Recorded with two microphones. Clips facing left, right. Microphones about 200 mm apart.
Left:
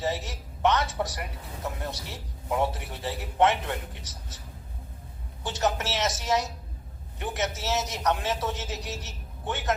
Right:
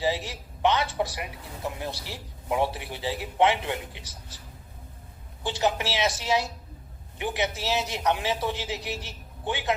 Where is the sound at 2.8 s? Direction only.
90° right.